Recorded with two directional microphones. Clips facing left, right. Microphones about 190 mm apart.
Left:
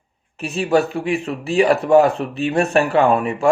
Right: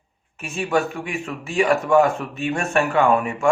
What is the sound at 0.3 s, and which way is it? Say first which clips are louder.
Speech: left 5 dB; 35° left (ahead or behind).